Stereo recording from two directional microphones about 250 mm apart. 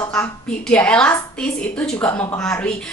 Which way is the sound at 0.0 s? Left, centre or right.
Centre.